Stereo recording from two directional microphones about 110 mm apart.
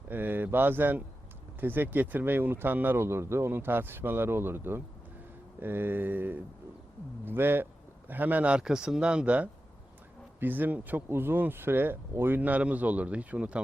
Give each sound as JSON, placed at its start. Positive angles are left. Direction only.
{"t": 0.1, "sound": "speech", "side_deg": -15}